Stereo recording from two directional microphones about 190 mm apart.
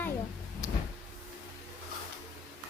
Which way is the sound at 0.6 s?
20° left (ahead or behind).